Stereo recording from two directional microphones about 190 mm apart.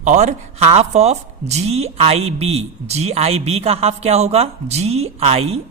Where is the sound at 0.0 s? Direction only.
35° right (ahead or behind).